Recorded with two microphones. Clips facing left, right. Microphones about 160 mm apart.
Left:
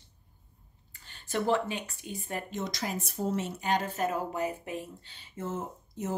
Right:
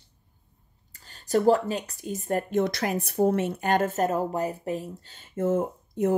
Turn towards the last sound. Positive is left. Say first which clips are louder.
# right 11 dB
turn(degrees=-55)  # may be behind; listen again after turning